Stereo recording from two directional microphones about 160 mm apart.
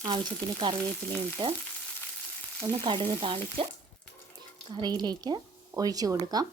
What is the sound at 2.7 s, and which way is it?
Stir, 30° right (ahead or behind).